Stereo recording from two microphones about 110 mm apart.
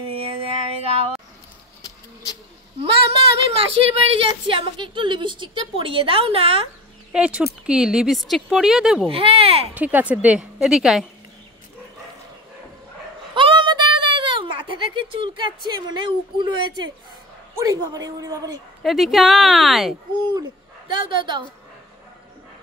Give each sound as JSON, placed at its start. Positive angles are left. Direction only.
{"t": 0.0, "sound": "a sound", "side_deg": -65}
{"t": 3.4, "sound": "a woman's voice", "side_deg": -60}
{"t": 7.1, "sound": "speech", "side_deg": -10}
{"t": 9.0, "sound": "a woman's voice", "side_deg": -55}
{"t": 9.8, "sound": "a woman's voice", "side_deg": -15}
{"t": 13.3, "sound": "a sound", "side_deg": -50}
{"t": 17.6, "sound": "a man's voice", "side_deg": -35}
{"t": 18.8, "sound": "speech", "side_deg": 0}
{"t": 20.9, "sound": "a woman's voice", "side_deg": -45}